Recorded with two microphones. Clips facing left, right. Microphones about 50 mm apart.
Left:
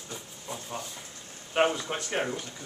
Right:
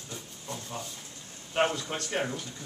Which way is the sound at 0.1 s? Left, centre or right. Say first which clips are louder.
Left 1 dB; centre.